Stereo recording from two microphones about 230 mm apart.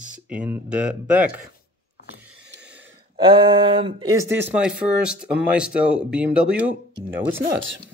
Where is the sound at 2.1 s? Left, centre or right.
Right.